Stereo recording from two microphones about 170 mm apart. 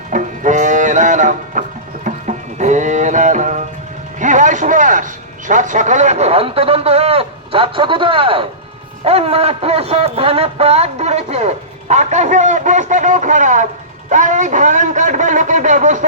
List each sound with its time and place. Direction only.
0.1 s music: 45° right (ahead or behind)
4.2 s a man's voice: 45° right (ahead or behind)